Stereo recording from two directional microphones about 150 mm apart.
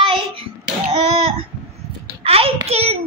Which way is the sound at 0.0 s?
40° right (ahead or behind).